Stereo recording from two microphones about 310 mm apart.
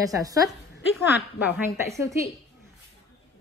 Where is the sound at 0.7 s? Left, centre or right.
Left.